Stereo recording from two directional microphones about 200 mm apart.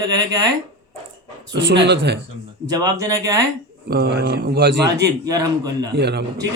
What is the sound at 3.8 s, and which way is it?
Speech, 50° right (ahead or behind).